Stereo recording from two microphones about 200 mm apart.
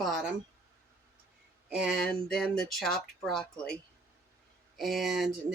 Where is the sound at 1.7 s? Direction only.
Centre (ahead or behind).